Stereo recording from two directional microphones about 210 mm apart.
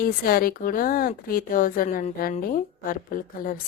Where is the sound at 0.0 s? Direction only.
45° left (ahead or behind).